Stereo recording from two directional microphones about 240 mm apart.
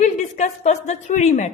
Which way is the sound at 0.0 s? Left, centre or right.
Left.